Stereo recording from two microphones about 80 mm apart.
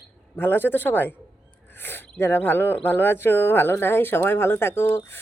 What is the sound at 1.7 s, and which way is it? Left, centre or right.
Speech, left.